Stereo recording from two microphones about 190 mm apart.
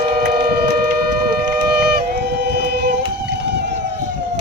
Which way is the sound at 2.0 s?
60° right (ahead or behind).